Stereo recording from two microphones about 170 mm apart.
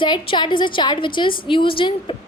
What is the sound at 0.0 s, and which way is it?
A woman's voice, 30° left (ahead or behind).